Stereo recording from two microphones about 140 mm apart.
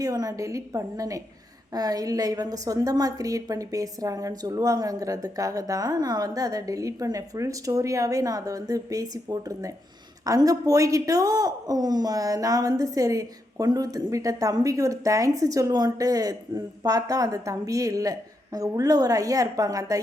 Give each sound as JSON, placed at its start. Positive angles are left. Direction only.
{"t": 0.0, "sound": "speech", "side_deg": -25}